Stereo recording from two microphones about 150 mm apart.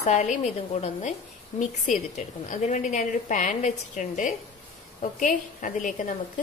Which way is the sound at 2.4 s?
55° left (ahead or behind).